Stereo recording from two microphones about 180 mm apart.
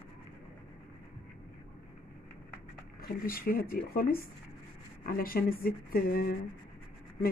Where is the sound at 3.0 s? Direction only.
55° left (ahead or behind).